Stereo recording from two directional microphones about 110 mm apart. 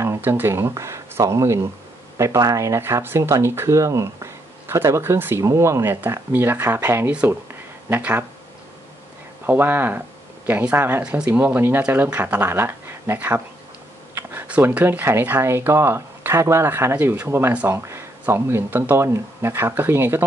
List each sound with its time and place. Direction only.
0.0 s speech: 25° right (ahead or behind)
9.5 s speech: 20° right (ahead or behind)